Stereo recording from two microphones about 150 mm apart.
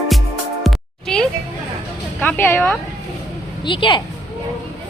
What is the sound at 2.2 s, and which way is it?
Speech, 10° left (ahead or behind).